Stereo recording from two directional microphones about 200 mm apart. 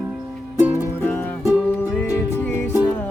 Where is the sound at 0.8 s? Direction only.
15° left (ahead or behind).